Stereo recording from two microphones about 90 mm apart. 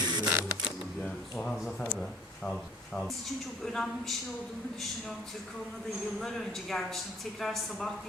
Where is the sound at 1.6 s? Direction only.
Centre (ahead or behind).